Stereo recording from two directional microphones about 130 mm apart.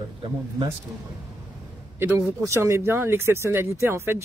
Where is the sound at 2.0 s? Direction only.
20° right (ahead or behind).